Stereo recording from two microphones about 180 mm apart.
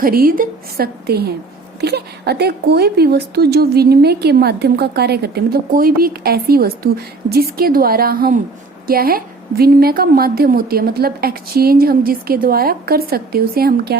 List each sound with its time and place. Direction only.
0.0 s speech: 55° right (ahead or behind)